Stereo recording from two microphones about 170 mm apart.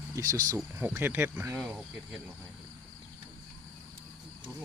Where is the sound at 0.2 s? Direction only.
20° right (ahead or behind).